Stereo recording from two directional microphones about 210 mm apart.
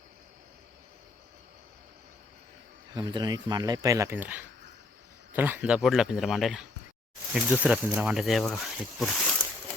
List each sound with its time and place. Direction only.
2.9 s speech: 20° right (ahead or behind); by 9.2 s centre (ahead or behind)